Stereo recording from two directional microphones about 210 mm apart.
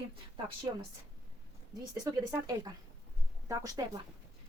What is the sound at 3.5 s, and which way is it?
Speech, 15° right (ahead or behind).